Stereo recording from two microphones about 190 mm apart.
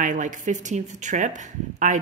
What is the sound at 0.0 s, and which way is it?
Speech, 40° right (ahead or behind).